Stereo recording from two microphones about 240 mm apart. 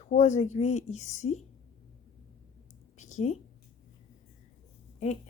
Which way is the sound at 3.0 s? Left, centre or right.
Left.